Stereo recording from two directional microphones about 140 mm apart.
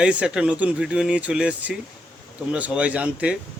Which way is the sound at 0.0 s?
5° right (ahead or behind).